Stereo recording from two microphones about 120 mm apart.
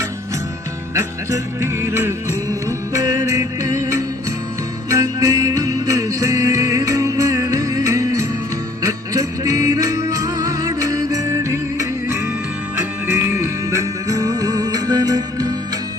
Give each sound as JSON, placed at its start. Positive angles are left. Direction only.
{"t": 0.9, "sound": "music", "side_deg": -25}